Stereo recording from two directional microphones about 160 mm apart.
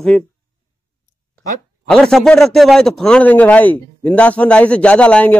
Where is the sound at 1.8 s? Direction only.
5° left (ahead or behind).